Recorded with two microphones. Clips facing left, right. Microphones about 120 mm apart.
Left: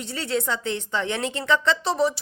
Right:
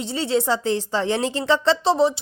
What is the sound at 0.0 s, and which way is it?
A woman's voice, 30° right (ahead or behind).